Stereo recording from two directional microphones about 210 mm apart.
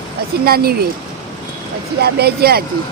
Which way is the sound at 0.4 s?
45° right (ahead or behind).